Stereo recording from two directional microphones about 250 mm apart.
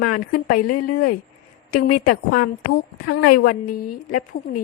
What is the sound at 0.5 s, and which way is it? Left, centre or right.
Speech, left.